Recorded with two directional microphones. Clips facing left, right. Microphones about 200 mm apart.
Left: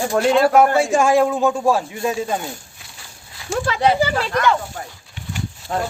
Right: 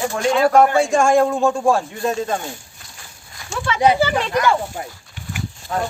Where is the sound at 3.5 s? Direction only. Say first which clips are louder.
Left 2 dB; 40° left (ahead or behind).